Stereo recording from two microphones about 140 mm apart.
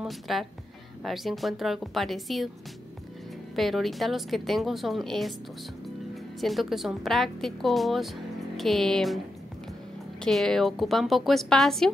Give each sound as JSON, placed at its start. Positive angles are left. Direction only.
{"t": 0.0, "sound": "a woman's voice", "side_deg": 0}
{"t": 3.5, "sound": "a woman's voice", "side_deg": 0}
{"t": 6.4, "sound": "a woman's voice", "side_deg": 0}
{"t": 10.2, "sound": "a woman's voice", "side_deg": 0}